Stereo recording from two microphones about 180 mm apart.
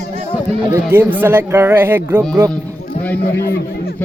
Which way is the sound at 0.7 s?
10° right (ahead or behind).